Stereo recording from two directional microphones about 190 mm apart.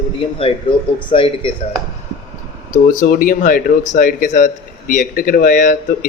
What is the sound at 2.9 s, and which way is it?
A man's voice, 45° left (ahead or behind).